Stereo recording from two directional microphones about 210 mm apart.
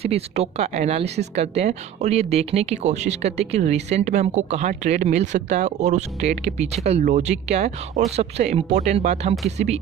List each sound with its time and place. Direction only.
0.0 s a woman's voice: 30° right (ahead or behind)